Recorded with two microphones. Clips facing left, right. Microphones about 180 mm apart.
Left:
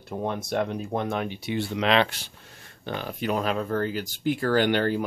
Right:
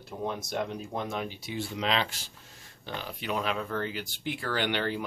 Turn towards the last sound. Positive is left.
turn(degrees=45)  # may be behind; listen again after turning